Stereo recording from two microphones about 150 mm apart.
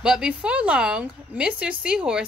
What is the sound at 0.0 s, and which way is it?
Speech, 5° right (ahead or behind).